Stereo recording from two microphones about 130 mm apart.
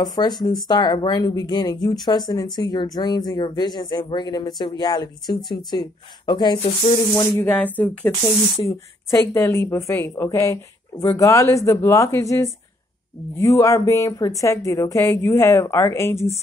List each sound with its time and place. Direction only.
0.0 s speech: 30° left (ahead or behind)
7.3 s a woman's voice: 15° left (ahead or behind)